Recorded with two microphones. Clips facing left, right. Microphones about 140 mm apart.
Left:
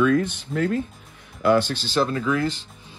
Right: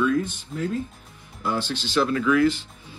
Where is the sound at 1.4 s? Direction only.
55° left (ahead or behind); by 2.5 s 30° left (ahead or behind).